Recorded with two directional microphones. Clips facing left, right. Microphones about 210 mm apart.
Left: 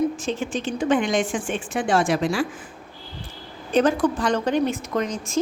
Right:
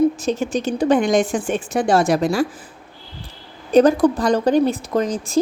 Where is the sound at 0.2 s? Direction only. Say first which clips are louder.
Right 5 dB; 40° right (ahead or behind).